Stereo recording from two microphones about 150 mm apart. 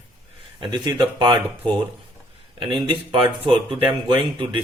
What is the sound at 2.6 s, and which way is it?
Speech, 35° right (ahead or behind).